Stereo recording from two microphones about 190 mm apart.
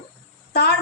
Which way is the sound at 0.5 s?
60° left (ahead or behind).